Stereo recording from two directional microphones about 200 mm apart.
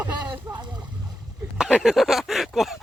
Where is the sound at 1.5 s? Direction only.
5° right (ahead or behind).